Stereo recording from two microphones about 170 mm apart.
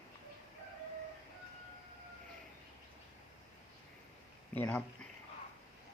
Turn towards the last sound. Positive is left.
turn(degrees=10)  # may be behind; listen again after turning